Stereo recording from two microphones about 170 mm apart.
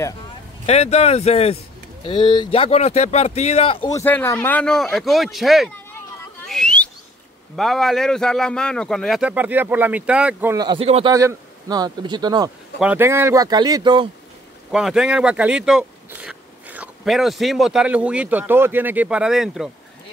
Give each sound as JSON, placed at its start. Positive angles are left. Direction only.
{"t": 0.7, "sound": "speech", "side_deg": 40}
{"t": 3.9, "sound": "speech", "side_deg": 10}
{"t": 6.4, "sound": "a sound", "side_deg": 5}
{"t": 7.5, "sound": "speech", "side_deg": 0}
{"t": 10.5, "sound": "speech", "side_deg": -25}
{"t": 12.8, "sound": "speech", "side_deg": -15}
{"t": 14.7, "sound": "speech", "side_deg": -5}